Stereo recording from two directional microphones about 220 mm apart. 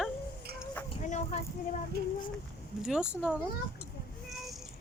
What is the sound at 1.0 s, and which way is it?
Speech, 30° left (ahead or behind).